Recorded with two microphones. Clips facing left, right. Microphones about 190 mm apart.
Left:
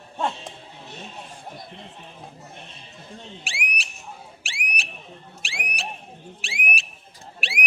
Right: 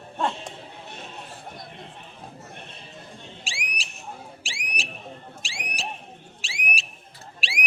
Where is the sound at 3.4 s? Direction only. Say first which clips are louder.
Left 3 dB; 60° left (ahead or behind).